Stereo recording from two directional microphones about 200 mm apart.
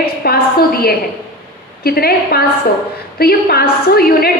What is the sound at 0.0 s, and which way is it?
A woman's voice, 50° left (ahead or behind).